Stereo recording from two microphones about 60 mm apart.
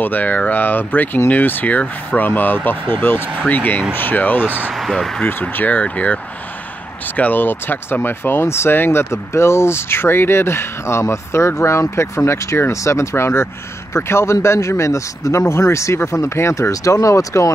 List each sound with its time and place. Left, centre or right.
0.0 s speech: left
4.7 s speech: centre
5.2 s speech: left
7.2 s speech: left